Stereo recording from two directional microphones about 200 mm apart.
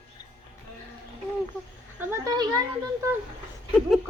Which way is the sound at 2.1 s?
15° right (ahead or behind).